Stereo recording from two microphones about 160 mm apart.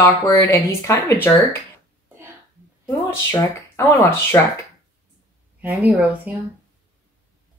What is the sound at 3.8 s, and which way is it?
Speech, 15° left (ahead or behind).